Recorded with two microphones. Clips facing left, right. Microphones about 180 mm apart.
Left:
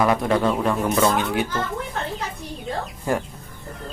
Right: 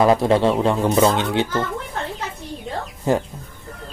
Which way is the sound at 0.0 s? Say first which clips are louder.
Right 4 dB; 25° right (ahead or behind).